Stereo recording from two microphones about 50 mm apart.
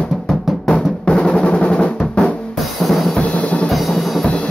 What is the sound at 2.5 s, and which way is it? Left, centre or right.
Drum, centre.